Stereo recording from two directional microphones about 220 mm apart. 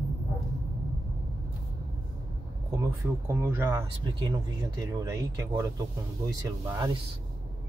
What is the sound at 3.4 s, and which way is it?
Speech, 10° right (ahead or behind).